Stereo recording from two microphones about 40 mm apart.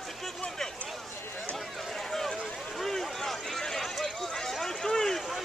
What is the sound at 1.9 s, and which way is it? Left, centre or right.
Run, centre.